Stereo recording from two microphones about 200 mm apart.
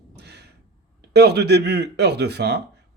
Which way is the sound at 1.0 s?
55° right (ahead or behind).